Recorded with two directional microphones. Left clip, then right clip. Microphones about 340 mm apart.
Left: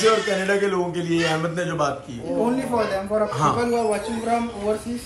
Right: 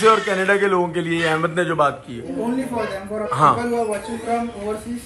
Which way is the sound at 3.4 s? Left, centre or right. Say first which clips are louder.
Right 8 dB; centre.